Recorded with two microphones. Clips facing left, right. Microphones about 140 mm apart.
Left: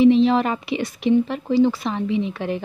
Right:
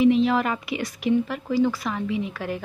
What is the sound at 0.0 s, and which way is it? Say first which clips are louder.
A woman's voice: left 4 dB; 25° left (ahead or behind).